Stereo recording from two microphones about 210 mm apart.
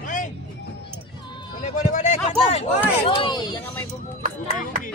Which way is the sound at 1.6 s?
35° left (ahead or behind).